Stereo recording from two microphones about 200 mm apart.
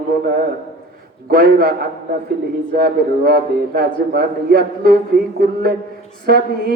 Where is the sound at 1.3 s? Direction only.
50° right (ahead or behind).